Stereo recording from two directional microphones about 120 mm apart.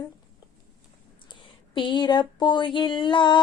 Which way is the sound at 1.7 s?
40° left (ahead or behind).